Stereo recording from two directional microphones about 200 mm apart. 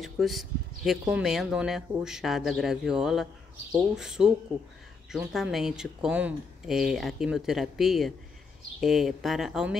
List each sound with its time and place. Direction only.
0.0 s speech: centre (ahead or behind)